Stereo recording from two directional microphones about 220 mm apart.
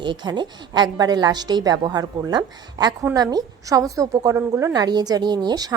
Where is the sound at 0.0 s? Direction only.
20° right (ahead or behind).